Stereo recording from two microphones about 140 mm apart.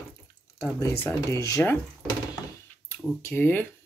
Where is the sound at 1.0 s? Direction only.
20° left (ahead or behind).